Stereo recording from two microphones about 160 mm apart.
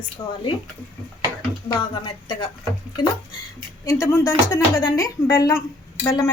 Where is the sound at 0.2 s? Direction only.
30° left (ahead or behind).